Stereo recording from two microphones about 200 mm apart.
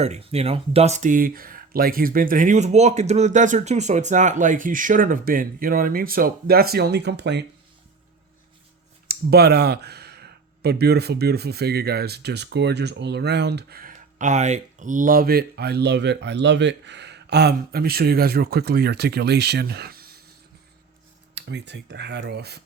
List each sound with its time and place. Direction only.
0.0 s speech: 30° right (ahead or behind); by 7.4 s 60° right (ahead or behind)
9.0 s speech: 55° right (ahead or behind)
21.3 s speech: 60° right (ahead or behind)